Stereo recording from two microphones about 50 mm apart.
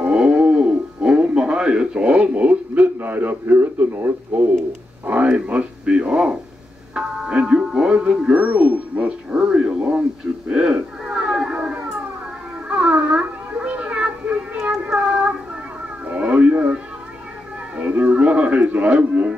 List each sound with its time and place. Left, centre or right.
0.0 s radio: centre
3.0 s speech: right
5.0 s speech: right
8.3 s speech: right
10.5 s cat: centre
12.6 s a sound: right
14.8 s child singing: right
16.1 s cat: right
17.7 s speech: right